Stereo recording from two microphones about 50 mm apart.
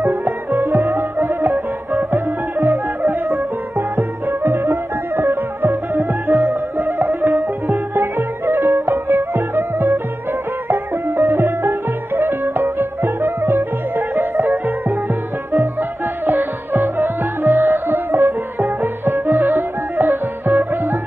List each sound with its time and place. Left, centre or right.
0.0 s music: right
16.3 s music: right